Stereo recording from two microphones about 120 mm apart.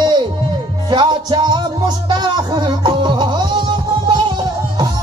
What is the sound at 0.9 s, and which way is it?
Music, 40° right (ahead or behind).